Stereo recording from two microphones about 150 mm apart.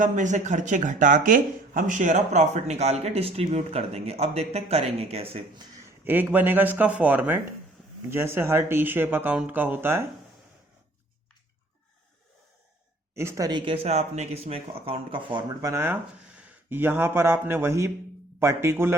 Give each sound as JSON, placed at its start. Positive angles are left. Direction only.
{"t": 0.0, "sound": "speech", "side_deg": -55}
{"t": 6.1, "sound": "speech", "side_deg": -10}
{"t": 13.1, "sound": "speech", "side_deg": -20}
{"t": 13.8, "sound": "speech", "side_deg": -45}